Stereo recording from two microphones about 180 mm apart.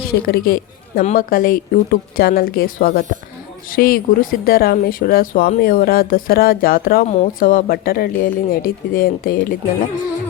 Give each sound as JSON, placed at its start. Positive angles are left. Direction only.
{"t": 0.0, "sound": "a woman's voice", "side_deg": 55}